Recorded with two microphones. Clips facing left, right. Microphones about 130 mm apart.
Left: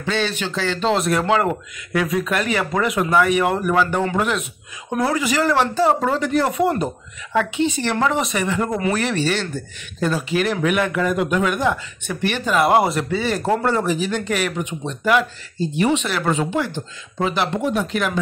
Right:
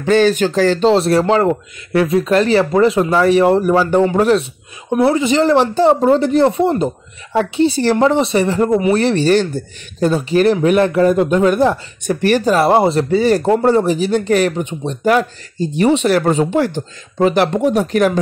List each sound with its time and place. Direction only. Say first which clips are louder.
0.0 s speech: right 11 dB; 45° right (ahead or behind)
17.6 s speech: right 7 dB; 35° right (ahead or behind)